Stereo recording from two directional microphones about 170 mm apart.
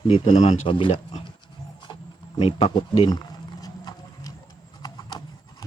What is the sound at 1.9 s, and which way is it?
Wild animals, 30° left (ahead or behind).